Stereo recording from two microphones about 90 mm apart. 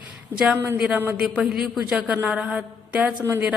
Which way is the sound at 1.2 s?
5° right (ahead or behind).